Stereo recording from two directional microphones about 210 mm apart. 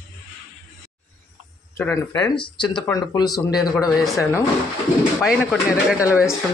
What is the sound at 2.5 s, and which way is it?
Speech, 20° left (ahead or behind).